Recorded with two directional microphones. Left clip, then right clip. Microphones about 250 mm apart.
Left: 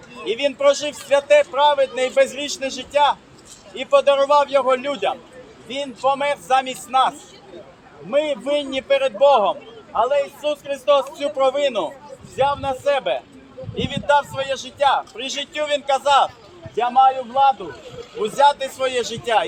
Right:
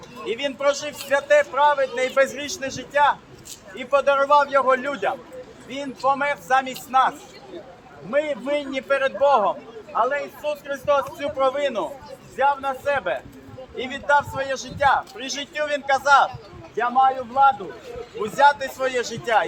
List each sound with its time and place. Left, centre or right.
0.3 s a man's voice: left
8.1 s a man's voice: left
18.2 s a man's voice: centre